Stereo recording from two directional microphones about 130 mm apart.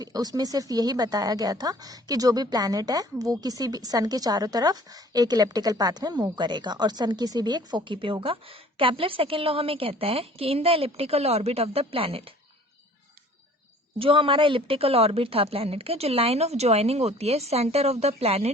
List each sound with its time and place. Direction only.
0.0 s speech: 30° right (ahead or behind); by 12.3 s 45° right (ahead or behind)
14.0 s speech: 45° right (ahead or behind)